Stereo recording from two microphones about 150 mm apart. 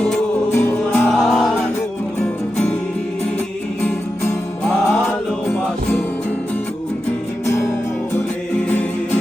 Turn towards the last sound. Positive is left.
turn(degrees=20)  # may be behind; listen again after turning